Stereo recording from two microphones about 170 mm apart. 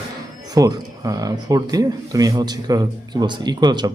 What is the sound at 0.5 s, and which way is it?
Speech, 20° right (ahead or behind).